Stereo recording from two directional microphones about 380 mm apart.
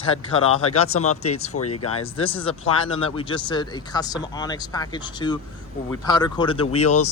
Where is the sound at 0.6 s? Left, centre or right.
Left.